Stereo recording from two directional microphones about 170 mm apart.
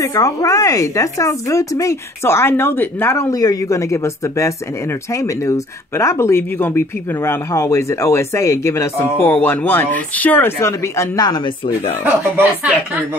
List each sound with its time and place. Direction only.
0.0 s speech: 20° left (ahead or behind)
12.0 s a woman's voice: 10° right (ahead or behind)